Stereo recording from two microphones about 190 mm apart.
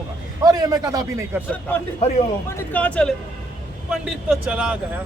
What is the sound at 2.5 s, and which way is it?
A man's voice, 10° left (ahead or behind).